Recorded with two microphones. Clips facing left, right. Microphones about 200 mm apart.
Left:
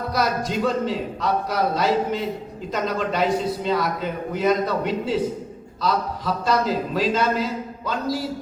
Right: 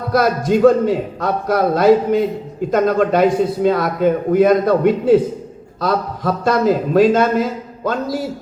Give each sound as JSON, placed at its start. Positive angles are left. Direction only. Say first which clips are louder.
{"t": 0.1, "sound": "a man's voice", "louder": "right 10 dB", "side_deg": -55}